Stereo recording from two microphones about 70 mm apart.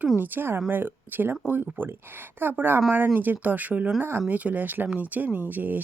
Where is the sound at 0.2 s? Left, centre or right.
Right.